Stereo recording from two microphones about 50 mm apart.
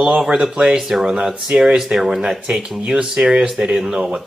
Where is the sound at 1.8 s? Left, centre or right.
Centre.